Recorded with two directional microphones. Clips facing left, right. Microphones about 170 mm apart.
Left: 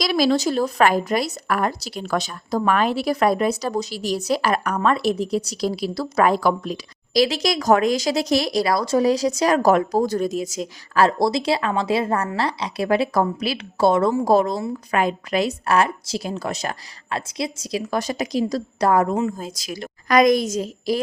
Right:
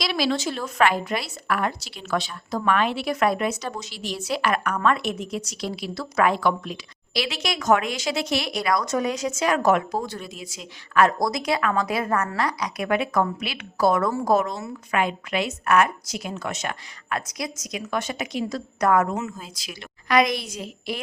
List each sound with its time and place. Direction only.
0.0 s speech: 40° left (ahead or behind)